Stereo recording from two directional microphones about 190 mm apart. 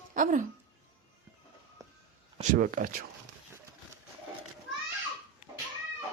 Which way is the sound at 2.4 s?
45° right (ahead or behind).